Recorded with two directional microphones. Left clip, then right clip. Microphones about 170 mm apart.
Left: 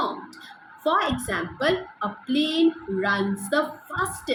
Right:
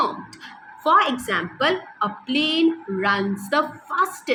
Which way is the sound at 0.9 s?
55° right (ahead or behind).